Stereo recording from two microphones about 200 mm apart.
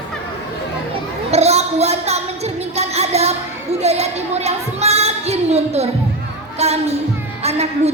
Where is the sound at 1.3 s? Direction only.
30° right (ahead or behind).